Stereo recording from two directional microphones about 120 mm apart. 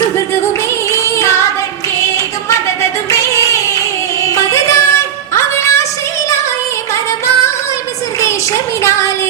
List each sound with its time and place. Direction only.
0.9 s music: 25° left (ahead or behind)
3.1 s a sound: 25° left (ahead or behind)
4.2 s music: 25° left (ahead or behind)